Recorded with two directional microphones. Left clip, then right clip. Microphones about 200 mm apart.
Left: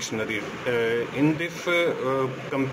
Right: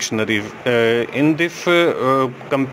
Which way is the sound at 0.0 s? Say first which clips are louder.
Right 8 dB; 45° right (ahead or behind).